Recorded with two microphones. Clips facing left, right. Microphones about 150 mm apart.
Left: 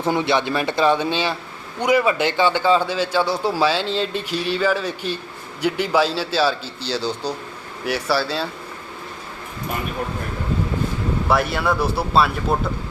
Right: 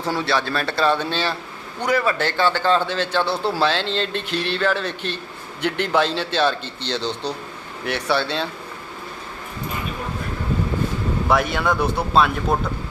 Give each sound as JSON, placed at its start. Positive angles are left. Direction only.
{"t": 0.0, "sound": "a man's voice", "side_deg": 20}
{"t": 11.3, "sound": "speech", "side_deg": 0}